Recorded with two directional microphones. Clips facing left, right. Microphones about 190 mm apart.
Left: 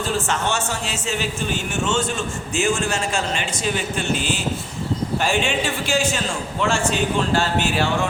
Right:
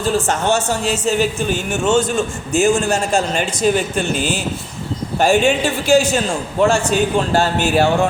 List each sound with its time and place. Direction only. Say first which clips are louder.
0.3 s a man's voice: right 6 dB; 40° right (ahead or behind)